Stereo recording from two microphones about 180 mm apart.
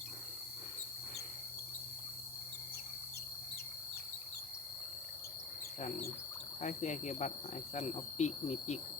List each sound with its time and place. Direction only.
6.6 s speech: 40° left (ahead or behind)